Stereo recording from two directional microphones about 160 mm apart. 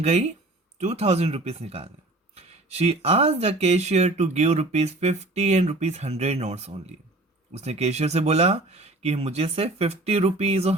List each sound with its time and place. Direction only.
0.0 s speech: 45° right (ahead or behind)